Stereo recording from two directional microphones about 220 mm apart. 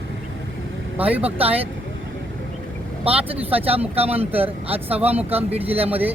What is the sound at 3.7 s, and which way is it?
Speech, 25° right (ahead or behind).